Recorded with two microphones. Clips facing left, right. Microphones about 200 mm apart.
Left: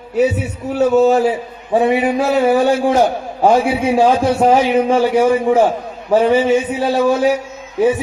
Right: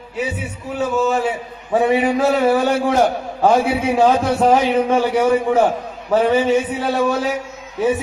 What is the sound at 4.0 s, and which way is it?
A man's voice, 10° left (ahead or behind).